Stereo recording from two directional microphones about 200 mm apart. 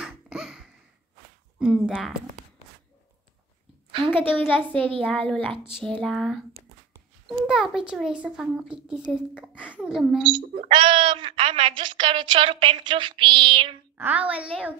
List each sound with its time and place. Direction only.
0.0 s baby laughter: 5° right (ahead or behind)
1.6 s a child's voice: 5° right (ahead or behind)
3.9 s a woman's voice: 25° right (ahead or behind)
4.3 s a child's voice: 10° left (ahead or behind)
7.4 s a child's voice: 5° right (ahead or behind)
10.7 s a woman's voice: 25° right (ahead or behind)
13.9 s a woman's voice: 10° right (ahead or behind)